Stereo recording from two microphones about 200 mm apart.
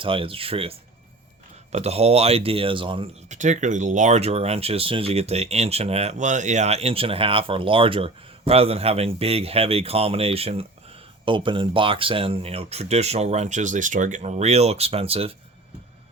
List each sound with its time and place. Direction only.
0.0 s speech: 25° right (ahead or behind)
3.2 s speech: 35° right (ahead or behind)